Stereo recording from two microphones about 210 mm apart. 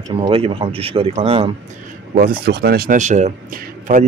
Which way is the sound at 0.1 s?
25° right (ahead or behind).